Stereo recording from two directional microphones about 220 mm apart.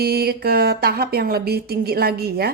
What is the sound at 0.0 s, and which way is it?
Speech, 45° right (ahead or behind).